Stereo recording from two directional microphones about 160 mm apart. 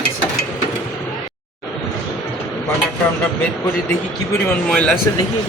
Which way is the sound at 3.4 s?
10° left (ahead or behind).